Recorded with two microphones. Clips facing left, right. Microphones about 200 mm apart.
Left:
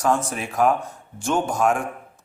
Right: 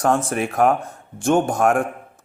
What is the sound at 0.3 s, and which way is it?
A man's voice, 55° right (ahead or behind).